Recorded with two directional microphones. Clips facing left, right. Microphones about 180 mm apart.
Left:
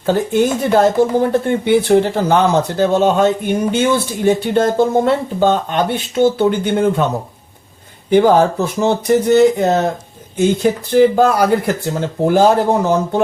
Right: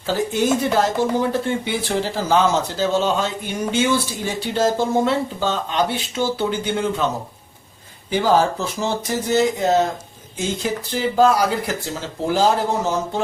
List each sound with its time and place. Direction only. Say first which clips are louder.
0.0 s speech: left 6 dB; 55° left (ahead or behind)
8.1 s speech: left 7 dB; 60° left (ahead or behind)